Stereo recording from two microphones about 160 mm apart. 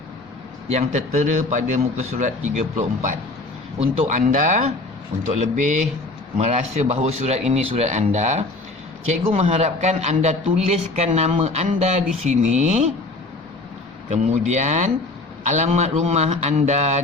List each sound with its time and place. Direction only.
0.7 s a man's voice: 45° right (ahead or behind)
14.1 s a man's voice: 45° right (ahead or behind)